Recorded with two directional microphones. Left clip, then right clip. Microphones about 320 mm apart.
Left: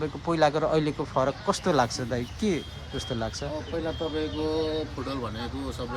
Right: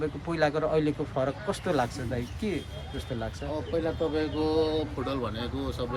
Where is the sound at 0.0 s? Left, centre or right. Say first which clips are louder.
Left 4 dB; centre.